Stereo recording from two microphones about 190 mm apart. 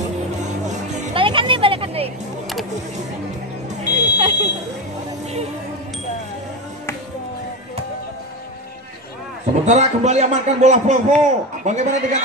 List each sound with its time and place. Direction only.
0.4 s music: 40° right (ahead or behind)
3.8 s smoke detector: 35° right (ahead or behind)
9.7 s a man's voice: 35° right (ahead or behind)